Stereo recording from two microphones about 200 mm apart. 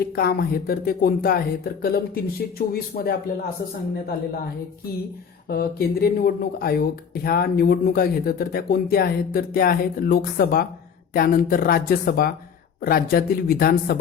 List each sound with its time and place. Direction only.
0.2 s speech: 50° left (ahead or behind)
5.5 s speech: 50° left (ahead or behind)